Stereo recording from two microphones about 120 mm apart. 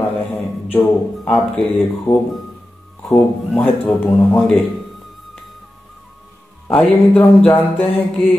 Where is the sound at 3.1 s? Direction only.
15° left (ahead or behind).